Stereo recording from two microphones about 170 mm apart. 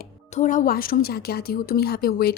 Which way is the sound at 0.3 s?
45° left (ahead or behind).